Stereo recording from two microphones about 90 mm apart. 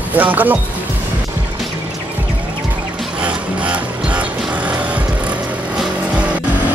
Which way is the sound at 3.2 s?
15° right (ahead or behind).